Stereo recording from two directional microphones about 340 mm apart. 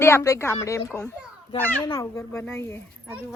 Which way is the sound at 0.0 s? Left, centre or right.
Centre.